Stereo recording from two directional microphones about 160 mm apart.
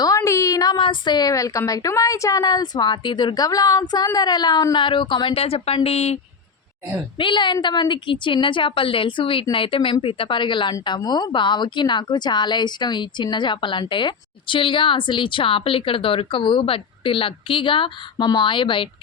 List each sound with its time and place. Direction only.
0.0 s a woman's voice: 20° left (ahead or behind); by 6.1 s 40° left (ahead or behind)
7.2 s a woman's voice: 30° left (ahead or behind)